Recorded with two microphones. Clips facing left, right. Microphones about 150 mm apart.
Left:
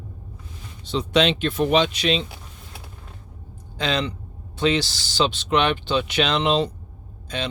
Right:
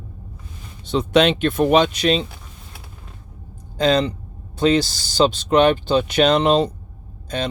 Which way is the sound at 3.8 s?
45° right (ahead or behind).